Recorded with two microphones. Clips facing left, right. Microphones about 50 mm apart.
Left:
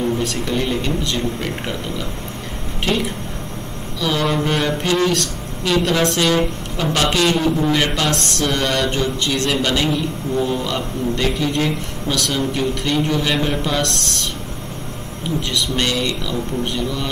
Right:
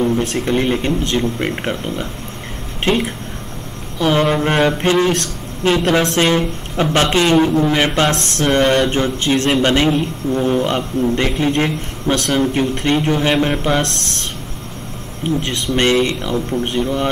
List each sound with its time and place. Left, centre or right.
0.2 s a man's voice: right
15.4 s a man's voice: right